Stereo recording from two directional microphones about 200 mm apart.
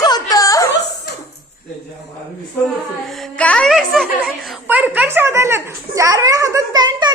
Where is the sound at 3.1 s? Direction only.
5° left (ahead or behind).